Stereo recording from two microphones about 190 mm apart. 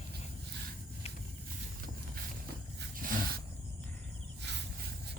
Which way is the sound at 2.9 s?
50° right (ahead or behind).